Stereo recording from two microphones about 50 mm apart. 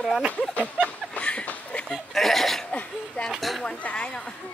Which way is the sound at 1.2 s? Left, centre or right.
Left.